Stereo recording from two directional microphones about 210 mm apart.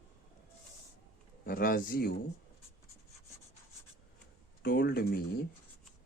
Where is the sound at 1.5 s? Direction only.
45° left (ahead or behind).